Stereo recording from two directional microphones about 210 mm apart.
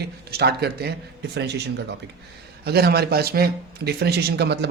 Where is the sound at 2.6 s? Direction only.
50° right (ahead or behind).